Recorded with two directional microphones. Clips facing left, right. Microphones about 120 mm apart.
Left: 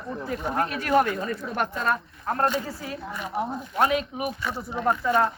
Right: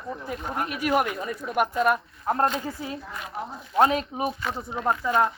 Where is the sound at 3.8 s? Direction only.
30° right (ahead or behind).